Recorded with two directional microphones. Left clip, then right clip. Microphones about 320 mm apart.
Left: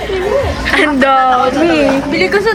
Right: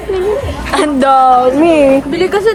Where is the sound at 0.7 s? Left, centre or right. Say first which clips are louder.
Right 1 dB; centre.